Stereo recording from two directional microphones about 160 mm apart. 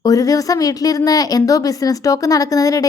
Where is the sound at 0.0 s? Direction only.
20° left (ahead or behind).